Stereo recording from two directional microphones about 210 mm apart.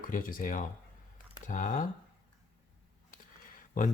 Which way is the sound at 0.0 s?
40° left (ahead or behind).